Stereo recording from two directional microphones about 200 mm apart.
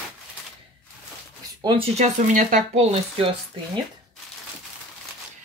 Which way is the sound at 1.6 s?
25° right (ahead or behind).